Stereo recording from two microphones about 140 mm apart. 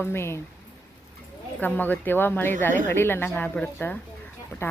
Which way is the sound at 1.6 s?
15° left (ahead or behind).